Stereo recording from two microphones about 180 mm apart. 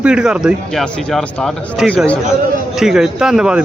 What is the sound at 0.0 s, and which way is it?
A man's voice, 5° right (ahead or behind).